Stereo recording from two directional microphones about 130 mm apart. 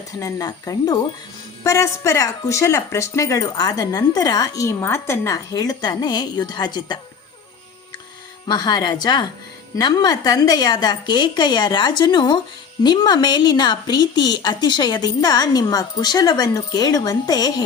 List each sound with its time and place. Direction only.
0.2 s speech: 25° left (ahead or behind)
8.4 s a woman's voice: 30° left (ahead or behind)